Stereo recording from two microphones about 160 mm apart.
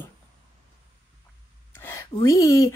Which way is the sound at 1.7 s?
15° left (ahead or behind).